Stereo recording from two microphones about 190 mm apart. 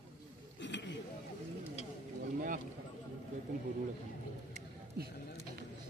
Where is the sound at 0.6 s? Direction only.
65° left (ahead or behind).